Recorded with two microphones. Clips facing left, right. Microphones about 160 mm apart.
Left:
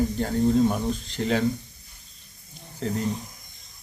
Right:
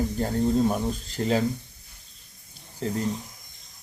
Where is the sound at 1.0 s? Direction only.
40° right (ahead or behind).